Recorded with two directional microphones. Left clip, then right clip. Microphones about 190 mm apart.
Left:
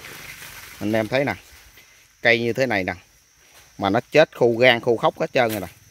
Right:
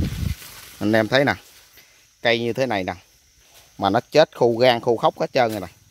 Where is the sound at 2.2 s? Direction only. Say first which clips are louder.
Left 2 dB; 5° right (ahead or behind).